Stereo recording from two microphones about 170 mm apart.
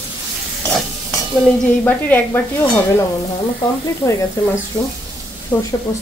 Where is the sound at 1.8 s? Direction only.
10° left (ahead or behind).